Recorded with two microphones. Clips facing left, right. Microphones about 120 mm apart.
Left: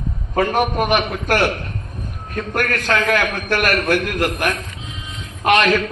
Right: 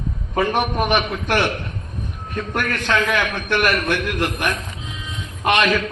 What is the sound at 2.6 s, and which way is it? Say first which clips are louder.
A man's voice: left 1 dB; 40° left (ahead or behind).